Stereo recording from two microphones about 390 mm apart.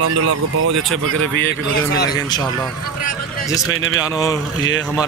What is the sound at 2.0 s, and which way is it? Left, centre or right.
Speech, centre.